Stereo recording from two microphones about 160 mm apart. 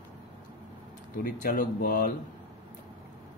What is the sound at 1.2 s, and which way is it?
Speech, 65° left (ahead or behind).